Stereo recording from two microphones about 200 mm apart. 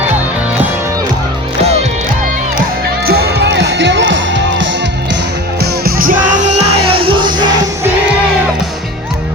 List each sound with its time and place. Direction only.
1.6 s music: 30° right (ahead or behind)
3.1 s music: 55° right (ahead or behind)
5.8 s music: 45° right (ahead or behind)
6.6 s music: 25° right (ahead or behind)